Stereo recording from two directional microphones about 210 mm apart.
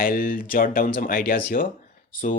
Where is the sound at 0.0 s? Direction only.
45° left (ahead or behind).